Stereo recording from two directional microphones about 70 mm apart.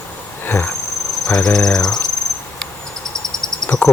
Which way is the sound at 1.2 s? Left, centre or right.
Centre.